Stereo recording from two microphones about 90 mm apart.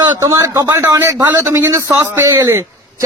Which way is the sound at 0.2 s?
35° right (ahead or behind).